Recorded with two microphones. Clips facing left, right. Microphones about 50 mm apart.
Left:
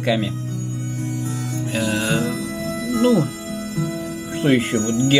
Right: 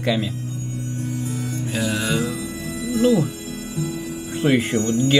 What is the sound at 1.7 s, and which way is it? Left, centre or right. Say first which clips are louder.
Music: left 2 dB; centre.